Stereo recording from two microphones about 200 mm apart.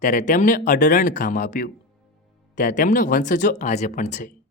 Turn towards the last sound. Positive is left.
turn(degrees=35)  # may be behind; listen again after turning